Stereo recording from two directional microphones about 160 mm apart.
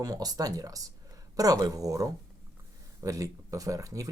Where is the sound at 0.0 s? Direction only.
25° right (ahead or behind).